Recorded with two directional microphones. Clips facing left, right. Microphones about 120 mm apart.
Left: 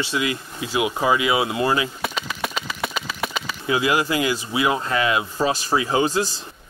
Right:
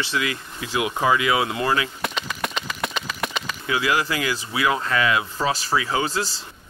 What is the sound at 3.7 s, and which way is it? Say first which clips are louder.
Speech: left 3 dB; 20° left (ahead or behind).